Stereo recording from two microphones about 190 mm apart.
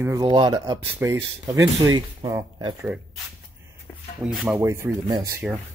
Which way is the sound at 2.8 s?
5° right (ahead or behind).